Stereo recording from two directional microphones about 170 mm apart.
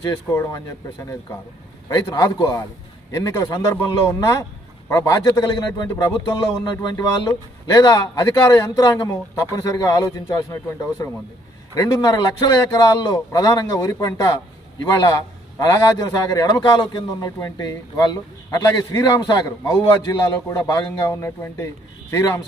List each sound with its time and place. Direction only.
0.1 s a man's voice: 15° left (ahead or behind)